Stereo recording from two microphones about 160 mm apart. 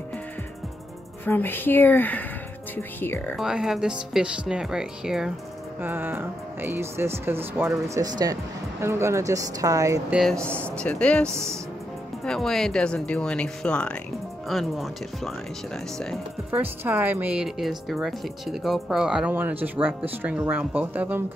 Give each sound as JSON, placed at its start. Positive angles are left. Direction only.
{"t": 1.2, "sound": "speech", "side_deg": 10}
{"t": 3.3, "sound": "speech", "side_deg": -5}
{"t": 10.0, "sound": "speech", "side_deg": 0}
{"t": 12.3, "sound": "speech", "side_deg": 0}
{"t": 16.5, "sound": "speech", "side_deg": -10}